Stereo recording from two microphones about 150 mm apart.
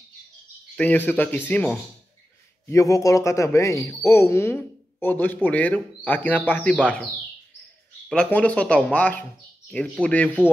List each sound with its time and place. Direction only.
0.7 s speech: 10° left (ahead or behind)
2.7 s speech: 20° left (ahead or behind)
8.1 s speech: 10° left (ahead or behind)